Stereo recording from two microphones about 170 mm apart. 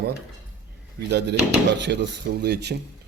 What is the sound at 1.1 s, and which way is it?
Speech, 90° right.